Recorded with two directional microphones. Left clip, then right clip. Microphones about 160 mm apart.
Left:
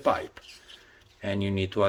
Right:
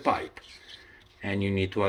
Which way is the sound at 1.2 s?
45° left (ahead or behind).